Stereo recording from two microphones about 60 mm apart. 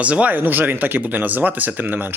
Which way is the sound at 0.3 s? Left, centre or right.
Right.